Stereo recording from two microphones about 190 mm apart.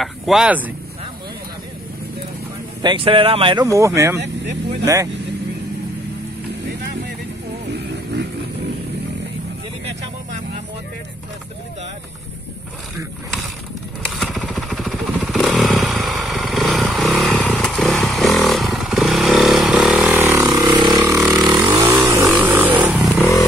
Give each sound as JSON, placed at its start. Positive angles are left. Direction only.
{"t": 0.0, "sound": "speech", "side_deg": -5}
{"t": 2.8, "sound": "speech", "side_deg": -25}
{"t": 3.6, "sound": "speech", "side_deg": -15}
{"t": 7.7, "sound": "vehicle", "side_deg": -60}
{"t": 14.0, "sound": "motorcycle", "side_deg": 0}
{"t": 21.0, "sound": "vehicle", "side_deg": -10}
{"t": 21.5, "sound": "vehicle", "side_deg": -20}